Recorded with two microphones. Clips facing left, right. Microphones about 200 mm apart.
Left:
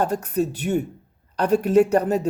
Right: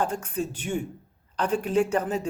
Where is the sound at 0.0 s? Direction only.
40° left (ahead or behind).